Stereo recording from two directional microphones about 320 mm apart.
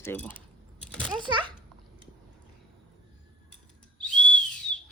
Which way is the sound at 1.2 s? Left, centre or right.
Centre.